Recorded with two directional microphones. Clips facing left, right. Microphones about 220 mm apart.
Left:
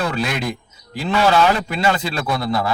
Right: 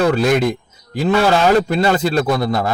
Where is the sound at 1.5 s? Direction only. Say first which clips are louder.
Right 6 dB; 40° right (ahead or behind).